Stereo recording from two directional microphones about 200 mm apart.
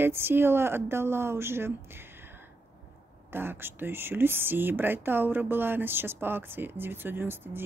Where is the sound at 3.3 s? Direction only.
10° right (ahead or behind).